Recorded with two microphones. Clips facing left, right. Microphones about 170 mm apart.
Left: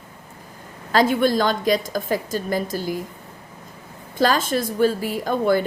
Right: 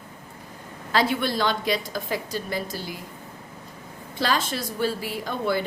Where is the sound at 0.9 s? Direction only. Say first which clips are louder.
Left 6 dB; 45° left (ahead or behind).